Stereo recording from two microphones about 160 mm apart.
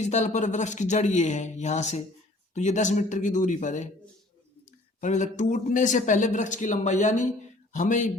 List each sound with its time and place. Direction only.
0.0 s speech: 45° left (ahead or behind)
4.9 s speech: 50° left (ahead or behind)